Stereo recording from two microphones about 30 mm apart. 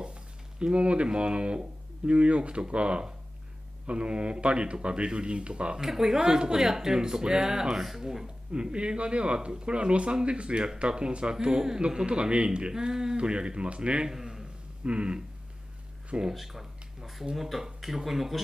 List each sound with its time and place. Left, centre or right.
0.0 s speech: right
5.8 s speech: centre
6.1 s a man's voice: right
8.7 s speech: right
11.3 s a man's voice: right
12.1 s speech: right
14.0 s a man's voice: centre
14.9 s speech: right
16.3 s speech: centre